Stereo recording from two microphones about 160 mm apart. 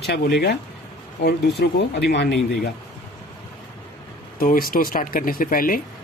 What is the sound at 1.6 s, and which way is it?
Speech, 90° left.